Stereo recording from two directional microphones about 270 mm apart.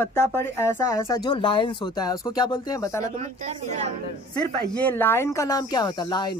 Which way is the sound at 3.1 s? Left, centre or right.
Right.